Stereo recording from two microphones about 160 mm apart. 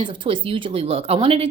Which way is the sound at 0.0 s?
35° right (ahead or behind).